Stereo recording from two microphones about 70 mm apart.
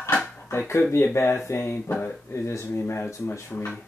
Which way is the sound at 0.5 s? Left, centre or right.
Left.